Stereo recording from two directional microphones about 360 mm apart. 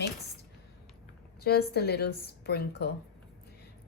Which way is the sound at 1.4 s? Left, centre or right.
Left.